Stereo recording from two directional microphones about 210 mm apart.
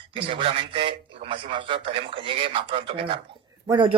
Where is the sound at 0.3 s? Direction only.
25° right (ahead or behind).